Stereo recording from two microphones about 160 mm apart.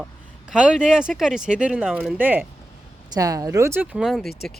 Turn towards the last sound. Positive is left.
turn(degrees=0)  # may be behind; listen again after turning